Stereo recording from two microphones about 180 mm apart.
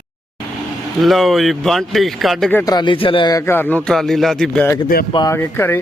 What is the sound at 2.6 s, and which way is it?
A man's voice, 25° left (ahead or behind).